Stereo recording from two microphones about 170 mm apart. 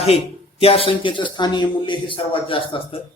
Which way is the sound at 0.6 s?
35° left (ahead or behind).